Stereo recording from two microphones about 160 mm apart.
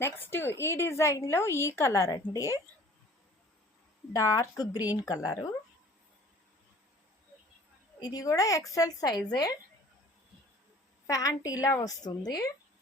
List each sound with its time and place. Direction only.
0.0 s a woman's voice: 15° left (ahead or behind)
4.1 s a woman's voice: 20° left (ahead or behind)
8.0 s a woman's voice: 20° left (ahead or behind)
11.0 s a woman's voice: 20° left (ahead or behind)